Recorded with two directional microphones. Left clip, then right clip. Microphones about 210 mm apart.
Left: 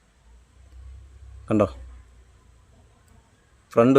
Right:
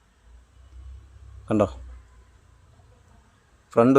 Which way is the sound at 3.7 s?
10° left (ahead or behind).